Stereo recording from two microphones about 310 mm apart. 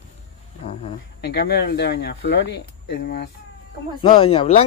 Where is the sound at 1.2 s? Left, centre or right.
Left.